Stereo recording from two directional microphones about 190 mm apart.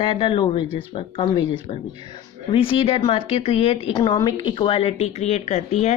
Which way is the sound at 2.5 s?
30° left (ahead or behind).